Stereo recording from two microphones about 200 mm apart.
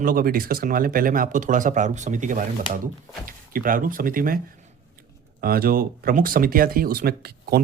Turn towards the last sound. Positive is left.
turn(degrees=-50)  # may be behind; listen again after turning